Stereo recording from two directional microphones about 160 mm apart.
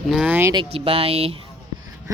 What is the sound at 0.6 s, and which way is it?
Speech, 35° right (ahead or behind).